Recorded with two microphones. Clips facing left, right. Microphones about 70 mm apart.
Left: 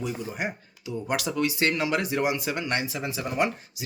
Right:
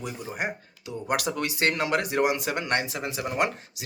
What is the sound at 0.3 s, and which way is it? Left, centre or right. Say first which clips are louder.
Speech: right 1 dB; right.